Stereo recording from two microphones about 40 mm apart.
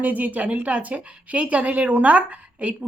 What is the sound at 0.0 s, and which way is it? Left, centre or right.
A woman's voice, right.